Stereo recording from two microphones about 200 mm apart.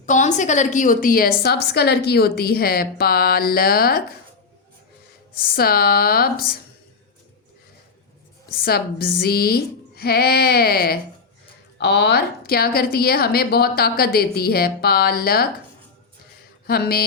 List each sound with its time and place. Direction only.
0.0 s a woman's voice: 40° left (ahead or behind)
5.4 s a woman's voice: 50° left (ahead or behind)
8.5 s a woman's voice: 50° left (ahead or behind)
16.6 s a woman's voice: 50° left (ahead or behind)